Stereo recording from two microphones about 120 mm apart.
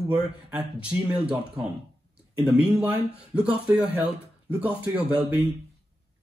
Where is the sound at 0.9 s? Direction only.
10° right (ahead or behind).